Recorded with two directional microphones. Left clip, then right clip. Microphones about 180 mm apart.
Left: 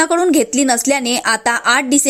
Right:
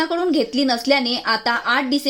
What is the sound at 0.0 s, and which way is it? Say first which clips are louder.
A woman's voice: left 6 dB; 25° left (ahead or behind).